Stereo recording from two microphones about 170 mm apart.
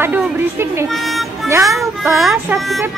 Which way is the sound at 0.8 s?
Centre (ahead or behind).